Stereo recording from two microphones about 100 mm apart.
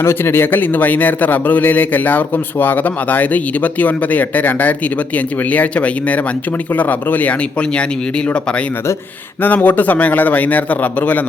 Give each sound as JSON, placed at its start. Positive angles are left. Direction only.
{"t": 0.0, "sound": "a man's voice", "side_deg": 25}
{"t": 9.4, "sound": "a man's voice", "side_deg": 15}